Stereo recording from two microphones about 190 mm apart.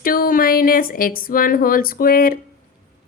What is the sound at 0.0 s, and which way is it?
Speech, 50° left (ahead or behind).